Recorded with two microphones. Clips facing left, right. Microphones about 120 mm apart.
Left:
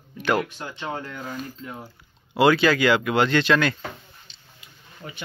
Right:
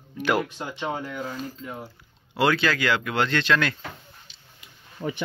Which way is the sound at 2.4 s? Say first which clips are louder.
Left 5 dB; 10° left (ahead or behind).